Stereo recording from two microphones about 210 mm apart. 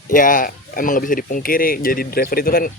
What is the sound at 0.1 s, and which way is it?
Speech, 40° left (ahead or behind).